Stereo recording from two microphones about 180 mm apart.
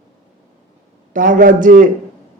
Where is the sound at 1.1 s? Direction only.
45° right (ahead or behind).